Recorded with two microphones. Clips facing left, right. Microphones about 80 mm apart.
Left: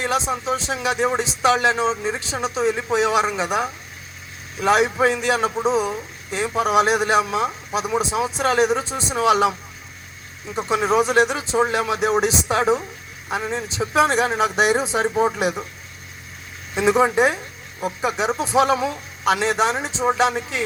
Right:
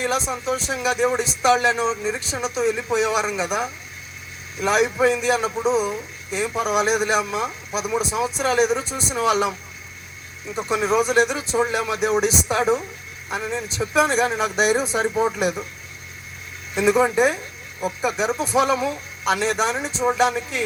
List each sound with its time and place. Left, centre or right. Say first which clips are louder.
0.0 s speech: left 1 dB; left
10.8 s a man's voice: left 1 dB; left
16.7 s speech: left 1 dB; left